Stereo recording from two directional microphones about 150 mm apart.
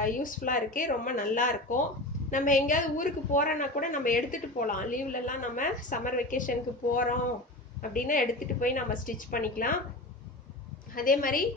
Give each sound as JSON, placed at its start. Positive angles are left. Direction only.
{"t": 0.0, "sound": "a woman's voice", "side_deg": 65}
{"t": 11.0, "sound": "a woman's voice", "side_deg": 70}